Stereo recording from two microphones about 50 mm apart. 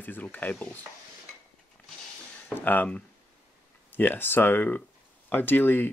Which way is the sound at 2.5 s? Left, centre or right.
Left.